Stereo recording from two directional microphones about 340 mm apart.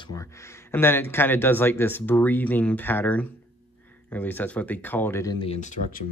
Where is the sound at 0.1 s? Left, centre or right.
Centre.